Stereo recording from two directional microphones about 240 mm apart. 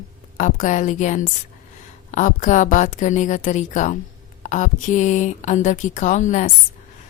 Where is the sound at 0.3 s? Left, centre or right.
Left.